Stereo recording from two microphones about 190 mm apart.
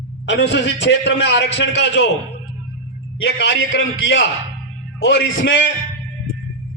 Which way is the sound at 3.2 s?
65° left (ahead or behind).